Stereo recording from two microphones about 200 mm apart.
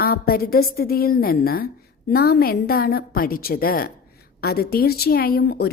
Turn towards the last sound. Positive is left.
turn(degrees=50)  # may be behind; listen again after turning